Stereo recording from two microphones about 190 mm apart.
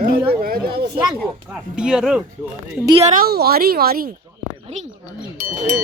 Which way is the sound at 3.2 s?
55° right (ahead or behind).